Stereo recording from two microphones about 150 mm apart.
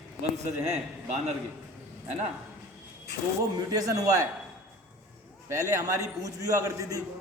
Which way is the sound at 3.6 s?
25° right (ahead or behind).